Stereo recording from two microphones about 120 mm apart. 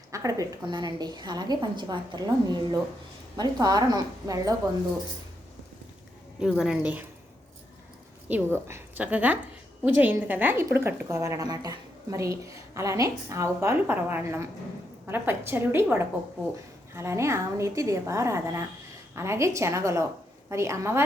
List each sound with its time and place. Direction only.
0.1 s a woman's voice: 30° right (ahead or behind)
6.6 s a woman's voice: 5° right (ahead or behind)
8.5 s a woman's voice: 20° right (ahead or behind)